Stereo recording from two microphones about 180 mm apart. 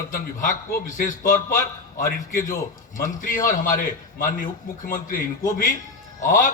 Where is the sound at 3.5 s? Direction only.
50° left (ahead or behind).